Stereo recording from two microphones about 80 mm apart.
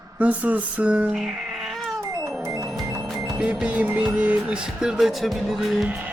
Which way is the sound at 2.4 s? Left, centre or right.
Right.